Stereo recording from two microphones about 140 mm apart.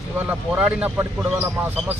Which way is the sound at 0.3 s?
10° right (ahead or behind).